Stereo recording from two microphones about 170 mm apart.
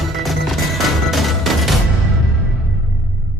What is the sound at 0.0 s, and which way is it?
Music, centre (ahead or behind).